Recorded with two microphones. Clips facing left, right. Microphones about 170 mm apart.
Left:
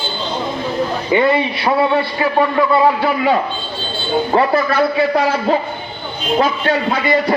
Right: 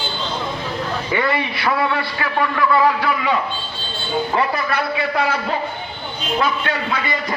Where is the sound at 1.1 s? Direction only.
20° left (ahead or behind).